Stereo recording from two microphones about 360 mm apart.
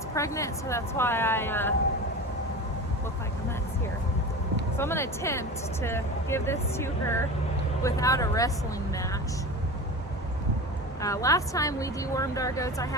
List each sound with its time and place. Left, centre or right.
0.1 s speech: centre
4.8 s speech: centre
11.0 s speech: centre